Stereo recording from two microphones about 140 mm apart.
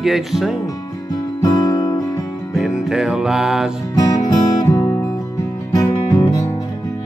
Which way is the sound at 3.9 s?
30° left (ahead or behind).